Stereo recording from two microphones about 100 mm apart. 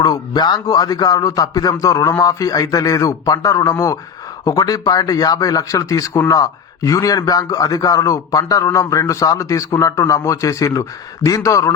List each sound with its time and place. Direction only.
0.0 s speech: 45° left (ahead or behind)